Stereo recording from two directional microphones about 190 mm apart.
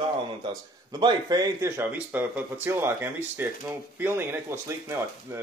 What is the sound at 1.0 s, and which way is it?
Speech, 20° right (ahead or behind).